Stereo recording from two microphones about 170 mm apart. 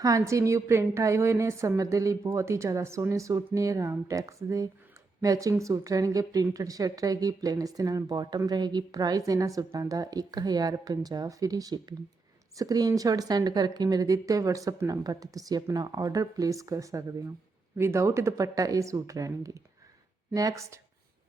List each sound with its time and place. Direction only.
0.0 s a woman's voice: 20° right (ahead or behind)